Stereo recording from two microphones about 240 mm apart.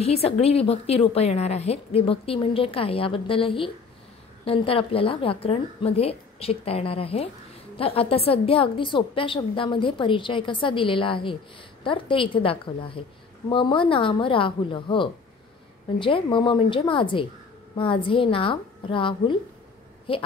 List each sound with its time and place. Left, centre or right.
0.0 s a woman's voice: left